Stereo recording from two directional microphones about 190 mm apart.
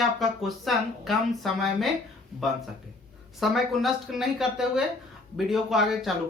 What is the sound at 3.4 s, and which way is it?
Speech, centre (ahead or behind).